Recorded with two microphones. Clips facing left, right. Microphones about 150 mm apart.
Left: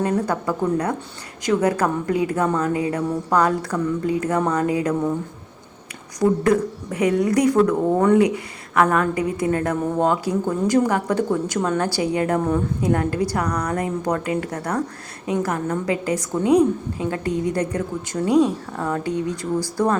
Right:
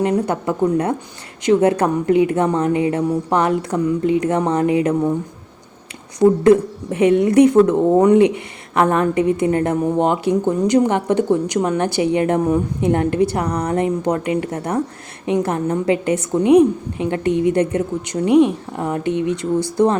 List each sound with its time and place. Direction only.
0.0 s a woman's voice: 20° right (ahead or behind)
6.1 s a woman's voice: 25° right (ahead or behind)